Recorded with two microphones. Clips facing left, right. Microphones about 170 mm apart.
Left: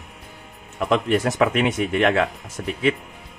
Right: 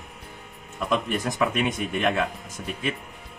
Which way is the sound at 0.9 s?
85° left.